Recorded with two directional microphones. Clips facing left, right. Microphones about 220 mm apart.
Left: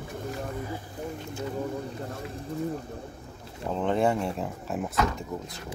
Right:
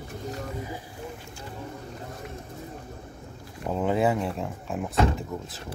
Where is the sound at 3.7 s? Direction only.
5° right (ahead or behind).